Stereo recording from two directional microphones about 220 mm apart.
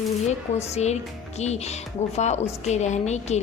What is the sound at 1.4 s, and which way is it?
A woman's voice, 30° left (ahead or behind).